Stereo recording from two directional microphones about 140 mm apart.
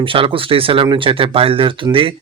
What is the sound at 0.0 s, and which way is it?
Speech, 40° right (ahead or behind).